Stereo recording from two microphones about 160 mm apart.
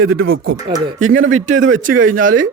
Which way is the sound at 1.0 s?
50° right (ahead or behind).